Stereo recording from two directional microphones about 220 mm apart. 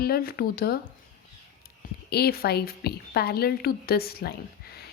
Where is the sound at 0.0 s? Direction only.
45° left (ahead or behind).